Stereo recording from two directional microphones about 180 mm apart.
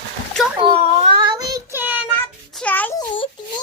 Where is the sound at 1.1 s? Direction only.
25° right (ahead or behind); by 2.0 s 10° right (ahead or behind).